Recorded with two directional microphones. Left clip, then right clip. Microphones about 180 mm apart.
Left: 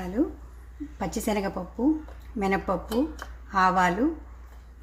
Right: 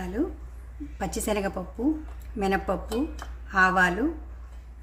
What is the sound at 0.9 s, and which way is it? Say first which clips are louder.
A woman's voice: even; 25° left (ahead or behind).